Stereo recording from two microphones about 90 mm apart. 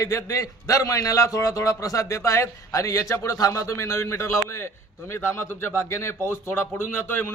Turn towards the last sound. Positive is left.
turn(degrees=25)  # may be behind; listen again after turning